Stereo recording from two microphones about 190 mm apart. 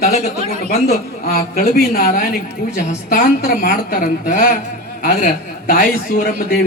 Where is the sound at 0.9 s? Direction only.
50° left (ahead or behind).